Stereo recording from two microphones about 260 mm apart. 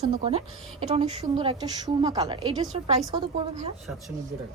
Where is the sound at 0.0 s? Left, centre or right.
Right.